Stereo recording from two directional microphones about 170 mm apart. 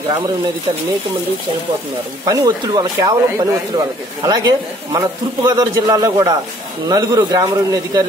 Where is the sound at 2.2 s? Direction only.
20° right (ahead or behind).